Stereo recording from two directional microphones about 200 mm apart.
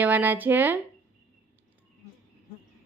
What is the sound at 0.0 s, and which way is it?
Speech, 10° right (ahead or behind).